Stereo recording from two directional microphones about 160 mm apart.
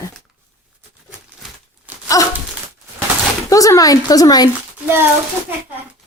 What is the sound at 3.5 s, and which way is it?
Speech, 20° left (ahead or behind).